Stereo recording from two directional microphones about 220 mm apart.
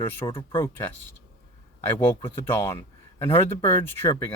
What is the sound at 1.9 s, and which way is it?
Speech, 10° left (ahead or behind).